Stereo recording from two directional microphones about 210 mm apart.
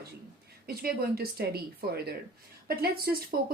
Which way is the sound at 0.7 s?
45° right (ahead or behind).